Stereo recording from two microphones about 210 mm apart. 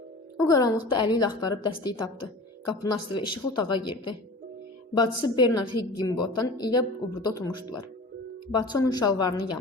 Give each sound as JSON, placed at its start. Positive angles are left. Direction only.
{"t": 0.3, "sound": "a woman's voice", "side_deg": 15}